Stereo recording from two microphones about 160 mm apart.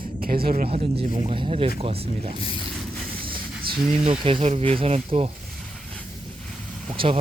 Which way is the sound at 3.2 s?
30° right (ahead or behind).